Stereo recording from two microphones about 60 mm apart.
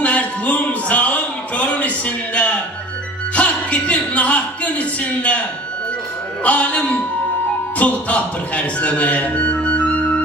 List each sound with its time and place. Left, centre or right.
0.0 s a sound: left
3.3 s speech: left
6.4 s a man's voice: left